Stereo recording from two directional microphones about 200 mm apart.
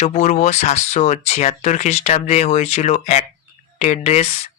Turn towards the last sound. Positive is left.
turn(degrees=35)  # may be behind; listen again after turning